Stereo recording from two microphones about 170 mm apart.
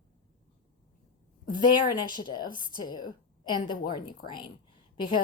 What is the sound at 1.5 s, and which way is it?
A woman's voice, 25° left (ahead or behind).